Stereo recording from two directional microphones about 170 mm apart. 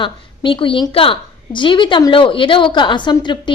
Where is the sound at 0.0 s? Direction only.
30° left (ahead or behind).